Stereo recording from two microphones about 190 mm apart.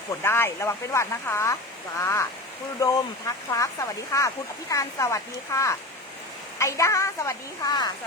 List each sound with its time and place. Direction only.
0.2 s speech: 10° left (ahead or behind)